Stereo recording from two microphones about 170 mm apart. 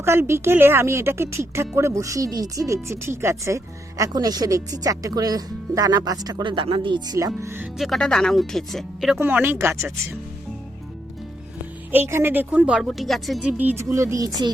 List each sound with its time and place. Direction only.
0.0 s speech: 15° right (ahead or behind)
7.8 s speech: centre (ahead or behind)
9.1 s speech: 10° right (ahead or behind)
11.9 s speech: 15° right (ahead or behind)